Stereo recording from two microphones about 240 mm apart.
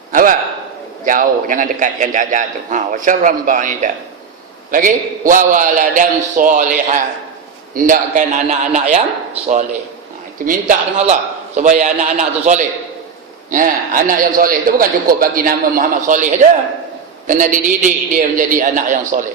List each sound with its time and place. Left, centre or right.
0.1 s a sound: right
1.0 s a man's voice: right
10.4 s a man's voice: right